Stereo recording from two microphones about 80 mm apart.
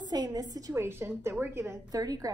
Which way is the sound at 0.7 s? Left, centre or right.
Right.